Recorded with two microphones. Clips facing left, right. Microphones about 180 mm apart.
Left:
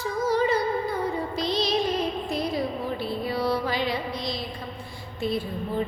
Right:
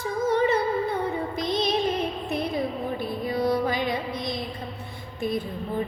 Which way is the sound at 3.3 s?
50° right (ahead or behind).